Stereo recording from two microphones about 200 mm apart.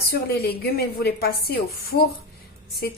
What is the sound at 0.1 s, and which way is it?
A woman's voice, 50° left (ahead or behind).